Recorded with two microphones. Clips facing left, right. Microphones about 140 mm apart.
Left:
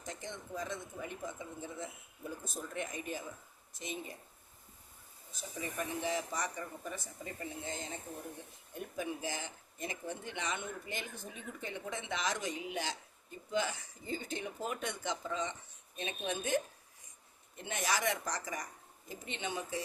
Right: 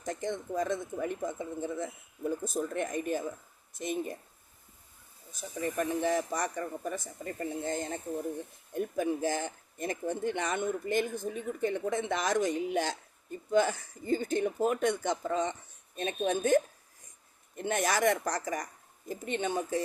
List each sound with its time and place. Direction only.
0.0 s speech: 50° right (ahead or behind)
5.5 s speech: 50° right (ahead or behind)
17.6 s speech: 50° right (ahead or behind)